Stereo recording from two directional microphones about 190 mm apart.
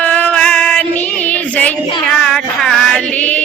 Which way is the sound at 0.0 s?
5° left (ahead or behind).